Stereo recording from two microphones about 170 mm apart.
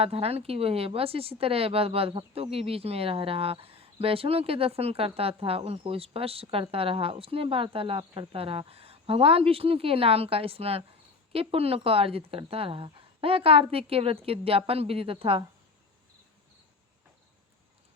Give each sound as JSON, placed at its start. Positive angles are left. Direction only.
{"t": 0.0, "sound": "speech", "side_deg": -35}